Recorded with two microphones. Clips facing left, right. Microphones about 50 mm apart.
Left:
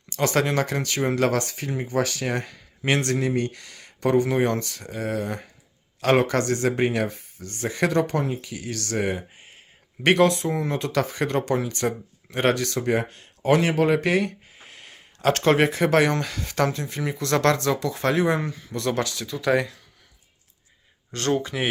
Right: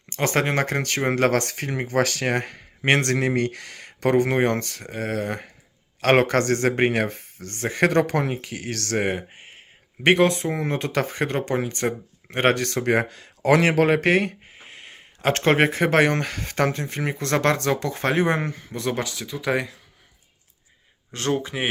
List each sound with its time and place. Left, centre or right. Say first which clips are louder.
0.1 s speech: even; right
8.0 s speech: right 2 dB; right
10.0 s speech: right 1 dB; right
10.2 s speech: even; right
12.8 s speech: right 2 dB; right
13.9 s speech: right 2 dB; right
14.7 s speech: right 3 dB; right
17.7 s speech: even; right
18.7 s speech: left 3 dB; centre
21.1 s speech: left 1 dB; centre